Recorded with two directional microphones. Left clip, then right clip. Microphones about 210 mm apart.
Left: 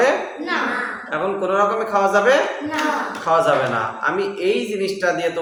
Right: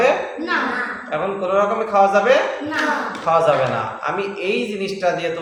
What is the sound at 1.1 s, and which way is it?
A man's voice, 10° left (ahead or behind).